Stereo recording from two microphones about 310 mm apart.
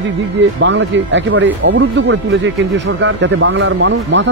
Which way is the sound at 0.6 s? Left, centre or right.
Right.